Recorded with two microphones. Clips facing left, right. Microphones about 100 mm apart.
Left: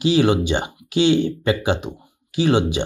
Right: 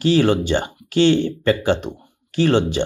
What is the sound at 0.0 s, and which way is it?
Speech, 15° left (ahead or behind).